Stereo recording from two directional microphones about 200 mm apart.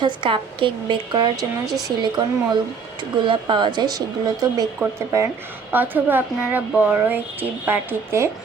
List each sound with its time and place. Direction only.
0.0 s a woman's voice: 25° right (ahead or behind)